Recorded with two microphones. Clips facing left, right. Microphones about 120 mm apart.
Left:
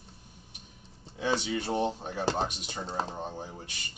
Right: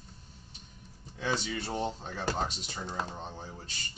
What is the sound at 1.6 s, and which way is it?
Speech, 15° left (ahead or behind).